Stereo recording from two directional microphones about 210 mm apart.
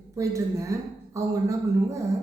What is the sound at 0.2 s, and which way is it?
A man's voice, 15° right (ahead or behind).